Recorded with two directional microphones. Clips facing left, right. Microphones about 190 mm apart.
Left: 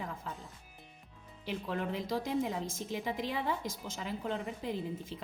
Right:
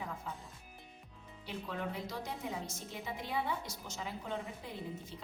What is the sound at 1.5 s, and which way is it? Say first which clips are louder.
A woman's voice: left 5 dB; 90° left.